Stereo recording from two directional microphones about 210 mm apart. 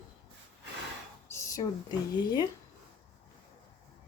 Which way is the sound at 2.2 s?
20° left (ahead or behind).